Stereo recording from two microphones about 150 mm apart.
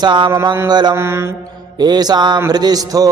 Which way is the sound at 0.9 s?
15° right (ahead or behind).